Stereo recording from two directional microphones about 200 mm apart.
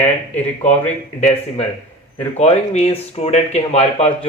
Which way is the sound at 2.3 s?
35° left (ahead or behind).